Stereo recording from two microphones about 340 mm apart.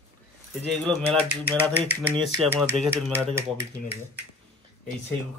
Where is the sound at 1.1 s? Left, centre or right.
Centre.